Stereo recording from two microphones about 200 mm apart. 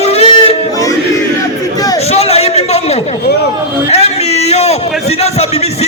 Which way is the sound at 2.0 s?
30° left (ahead or behind).